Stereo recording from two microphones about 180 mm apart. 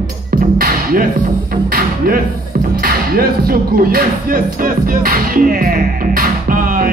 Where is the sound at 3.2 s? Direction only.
55° right (ahead or behind).